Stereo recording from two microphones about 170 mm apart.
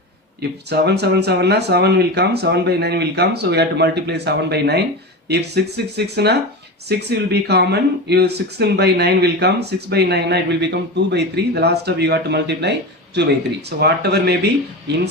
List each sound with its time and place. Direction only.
0.7 s speech: 75° right (ahead or behind)
13.7 s speech: 75° right (ahead or behind)